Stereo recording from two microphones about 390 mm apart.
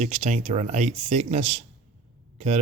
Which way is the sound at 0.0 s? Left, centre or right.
Centre.